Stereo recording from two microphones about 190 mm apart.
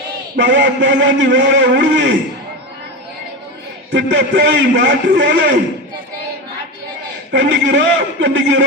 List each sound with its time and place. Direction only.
0.3 s a man's voice: 70° right (ahead or behind)
3.9 s a man's voice: 70° right (ahead or behind)
7.3 s a man's voice: 75° right (ahead or behind)